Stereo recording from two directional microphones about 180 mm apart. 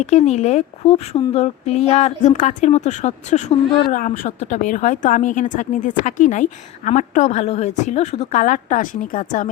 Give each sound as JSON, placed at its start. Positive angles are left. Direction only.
{"t": 0.0, "sound": "a woman's voice", "side_deg": 40}